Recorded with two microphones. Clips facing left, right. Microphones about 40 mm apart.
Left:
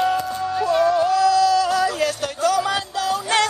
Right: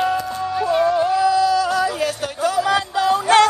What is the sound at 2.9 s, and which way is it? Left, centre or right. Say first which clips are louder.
Music: right 6 dB; right.